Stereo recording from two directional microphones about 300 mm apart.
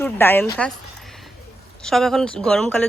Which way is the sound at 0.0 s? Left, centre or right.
Centre.